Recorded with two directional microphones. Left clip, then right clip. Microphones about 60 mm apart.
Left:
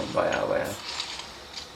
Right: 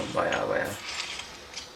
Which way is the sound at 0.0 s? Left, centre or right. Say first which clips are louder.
Left 2 dB; right.